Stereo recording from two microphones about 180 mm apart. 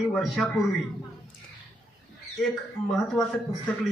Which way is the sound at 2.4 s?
Centre (ahead or behind).